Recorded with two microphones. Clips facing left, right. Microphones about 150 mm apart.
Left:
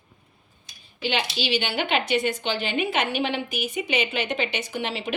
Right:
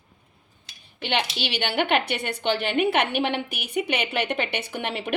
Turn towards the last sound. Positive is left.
turn(degrees=-55)  # may be behind; listen again after turning